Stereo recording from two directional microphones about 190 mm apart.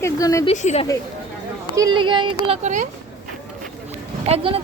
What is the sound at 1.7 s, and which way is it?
Speech, 20° right (ahead or behind).